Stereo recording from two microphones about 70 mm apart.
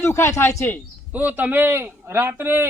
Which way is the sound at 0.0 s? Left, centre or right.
Left.